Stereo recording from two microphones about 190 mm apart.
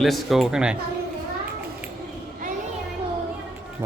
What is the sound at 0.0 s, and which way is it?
Speech, centre (ahead or behind).